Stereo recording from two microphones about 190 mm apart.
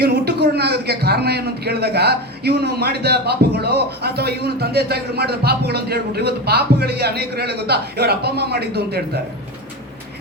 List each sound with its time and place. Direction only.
0.0 s a man's voice: 60° right (ahead or behind)